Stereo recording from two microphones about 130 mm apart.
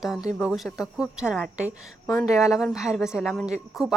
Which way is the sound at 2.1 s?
25° left (ahead or behind).